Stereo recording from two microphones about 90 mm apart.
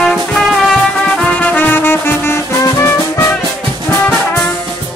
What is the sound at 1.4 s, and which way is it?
Music, 20° left (ahead or behind).